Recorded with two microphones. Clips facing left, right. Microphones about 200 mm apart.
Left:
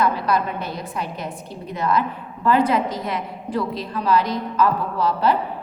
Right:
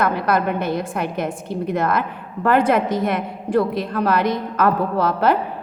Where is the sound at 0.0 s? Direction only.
50° right (ahead or behind).